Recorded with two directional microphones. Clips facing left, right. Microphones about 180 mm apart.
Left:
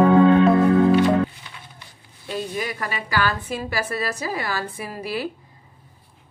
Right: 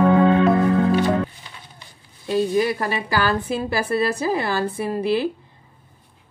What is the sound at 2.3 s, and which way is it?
A woman's voice, 30° right (ahead or behind).